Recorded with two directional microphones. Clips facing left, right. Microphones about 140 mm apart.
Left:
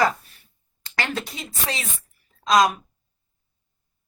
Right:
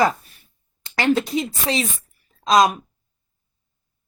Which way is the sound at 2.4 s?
20° right (ahead or behind).